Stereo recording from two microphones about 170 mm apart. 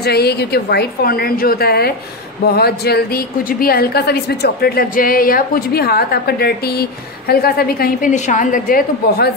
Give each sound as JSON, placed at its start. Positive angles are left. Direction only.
{"t": 0.0, "sound": "a woman's voice", "side_deg": 70}